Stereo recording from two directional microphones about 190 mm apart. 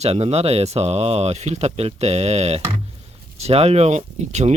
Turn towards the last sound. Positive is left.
turn(degrees=-35)  # may be behind; listen again after turning